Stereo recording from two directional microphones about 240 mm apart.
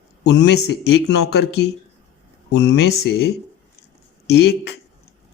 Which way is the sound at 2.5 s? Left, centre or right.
Left.